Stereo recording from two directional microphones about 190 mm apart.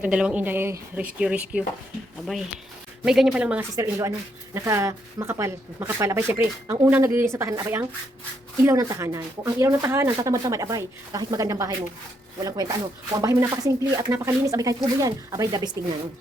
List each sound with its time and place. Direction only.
0.0 s speech: 5° right (ahead or behind)
3.0 s speech: 5° right (ahead or behind); by 15.7 s 20° right (ahead or behind)